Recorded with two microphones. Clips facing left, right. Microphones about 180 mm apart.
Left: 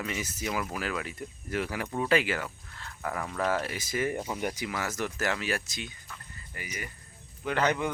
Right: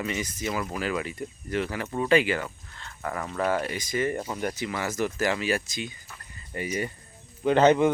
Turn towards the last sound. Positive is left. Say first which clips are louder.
# right 9 dB
turn(degrees=-25)  # may be behind; listen again after turning